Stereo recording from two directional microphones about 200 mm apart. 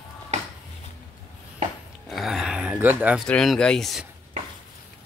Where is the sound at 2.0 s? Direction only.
Centre (ahead or behind).